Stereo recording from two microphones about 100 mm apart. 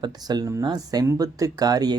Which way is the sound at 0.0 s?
45° right (ahead or behind).